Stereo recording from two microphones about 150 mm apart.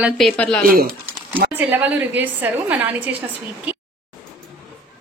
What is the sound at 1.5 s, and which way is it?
A woman's voice, 10° right (ahead or behind).